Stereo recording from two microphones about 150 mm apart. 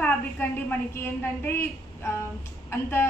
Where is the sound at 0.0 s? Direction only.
10° left (ahead or behind).